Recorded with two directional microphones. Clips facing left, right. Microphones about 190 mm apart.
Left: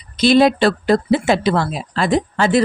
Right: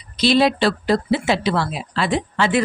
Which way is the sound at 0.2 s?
50° left (ahead or behind).